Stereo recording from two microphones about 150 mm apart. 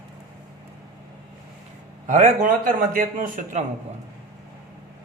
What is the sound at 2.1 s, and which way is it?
A man's voice, 60° right (ahead or behind).